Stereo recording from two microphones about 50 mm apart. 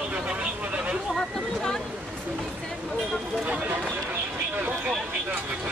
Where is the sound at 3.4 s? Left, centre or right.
Right.